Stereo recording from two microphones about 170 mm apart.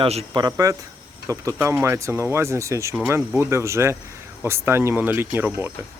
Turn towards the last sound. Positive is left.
turn(degrees=-10)  # may be behind; listen again after turning